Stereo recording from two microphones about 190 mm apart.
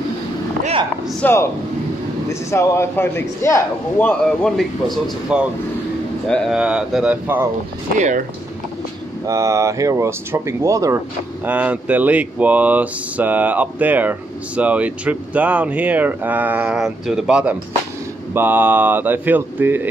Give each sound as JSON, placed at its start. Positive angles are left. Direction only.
{"t": 1.2, "sound": "a man's voice", "side_deg": 15}
{"t": 9.2, "sound": "speech", "side_deg": -15}